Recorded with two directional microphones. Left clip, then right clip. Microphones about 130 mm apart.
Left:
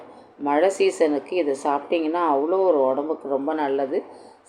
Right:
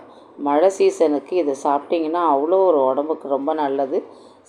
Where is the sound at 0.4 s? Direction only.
20° right (ahead or behind).